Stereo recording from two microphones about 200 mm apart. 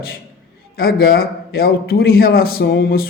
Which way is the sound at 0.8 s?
50° left (ahead or behind).